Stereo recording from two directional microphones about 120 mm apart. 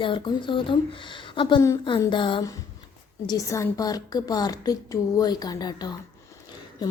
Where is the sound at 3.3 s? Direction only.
25° left (ahead or behind).